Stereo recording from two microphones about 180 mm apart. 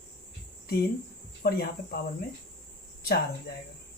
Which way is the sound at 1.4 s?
60° left (ahead or behind).